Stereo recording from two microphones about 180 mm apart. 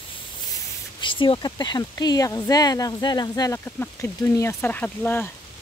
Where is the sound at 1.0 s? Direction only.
25° left (ahead or behind).